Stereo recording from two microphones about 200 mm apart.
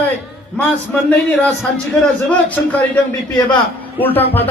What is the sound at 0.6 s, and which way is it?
A man's voice, 10° left (ahead or behind).